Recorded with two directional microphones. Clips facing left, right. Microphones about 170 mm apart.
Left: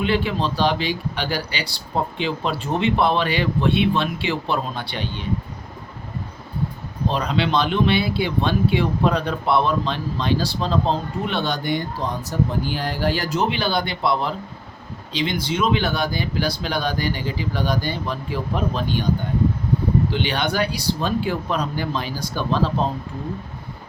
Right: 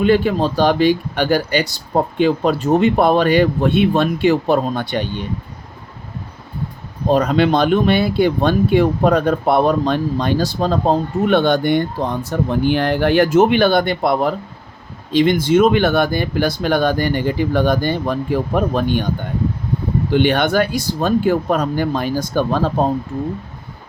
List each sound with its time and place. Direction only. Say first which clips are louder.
0.0 s speech: right 7 dB; 45° right (ahead or behind)
7.1 s speech: right 8 dB; 45° right (ahead or behind)
20.1 s speech: right 8 dB; 50° right (ahead or behind)